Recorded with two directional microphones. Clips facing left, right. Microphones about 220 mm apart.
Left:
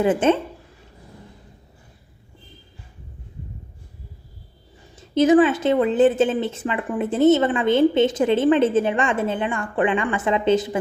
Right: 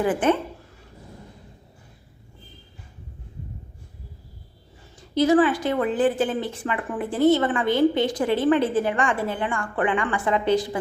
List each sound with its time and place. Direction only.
0.0 s a woman's voice: 25° left (ahead or behind)
4.9 s a woman's voice: 20° left (ahead or behind)